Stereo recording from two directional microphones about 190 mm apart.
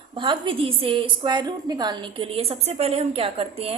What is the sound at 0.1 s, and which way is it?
A woman's voice, 25° right (ahead or behind).